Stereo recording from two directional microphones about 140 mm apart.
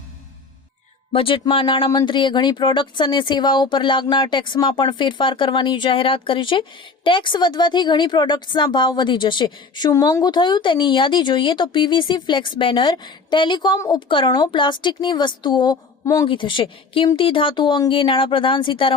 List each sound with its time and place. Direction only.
1.1 s a woman's voice: 40° left (ahead or behind)